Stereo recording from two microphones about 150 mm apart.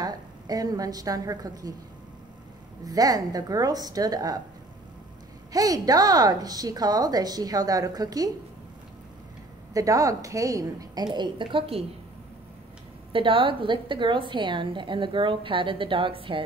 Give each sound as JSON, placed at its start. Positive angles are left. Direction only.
{"t": 0.0, "sound": "a woman's voice", "side_deg": -25}
{"t": 2.8, "sound": "a woman's voice", "side_deg": -25}
{"t": 5.5, "sound": "a woman's voice", "side_deg": -25}
{"t": 9.8, "sound": "a woman's voice", "side_deg": -20}
{"t": 13.1, "sound": "a woman's voice", "side_deg": -35}